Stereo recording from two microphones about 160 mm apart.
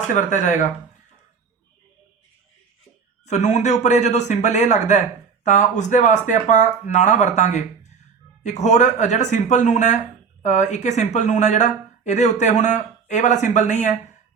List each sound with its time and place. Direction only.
0.1 s a man's voice: 50° left (ahead or behind)
3.2 s a man's voice: 45° left (ahead or behind)